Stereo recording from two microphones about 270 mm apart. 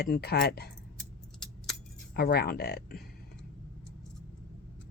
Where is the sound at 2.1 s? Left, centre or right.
Left.